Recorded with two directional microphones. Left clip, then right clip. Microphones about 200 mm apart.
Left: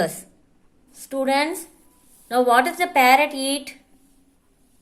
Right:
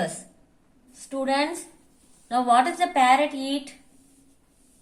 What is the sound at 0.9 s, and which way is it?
A woman's voice, 35° left (ahead or behind).